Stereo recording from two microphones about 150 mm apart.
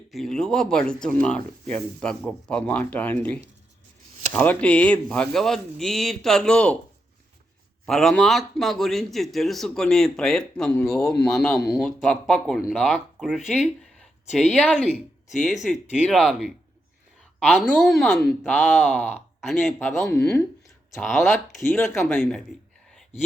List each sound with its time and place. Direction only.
0.1 s a man's voice: centre (ahead or behind)
7.9 s a man's voice: 5° left (ahead or behind)
13.6 s a sound: centre (ahead or behind)
14.5 s a man's voice: 10° left (ahead or behind)
17.5 s a man's voice: centre (ahead or behind)
19.5 s a man's voice: centre (ahead or behind)